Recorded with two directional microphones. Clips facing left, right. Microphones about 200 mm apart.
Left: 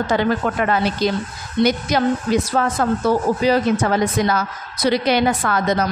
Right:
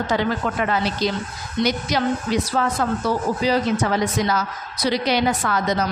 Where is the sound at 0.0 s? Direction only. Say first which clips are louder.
Left 3 dB; 55° left (ahead or behind).